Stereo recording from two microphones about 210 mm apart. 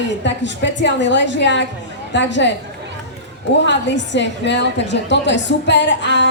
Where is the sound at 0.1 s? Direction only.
60° left (ahead or behind).